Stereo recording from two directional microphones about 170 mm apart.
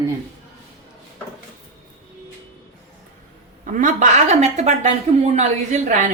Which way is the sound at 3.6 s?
50° right (ahead or behind).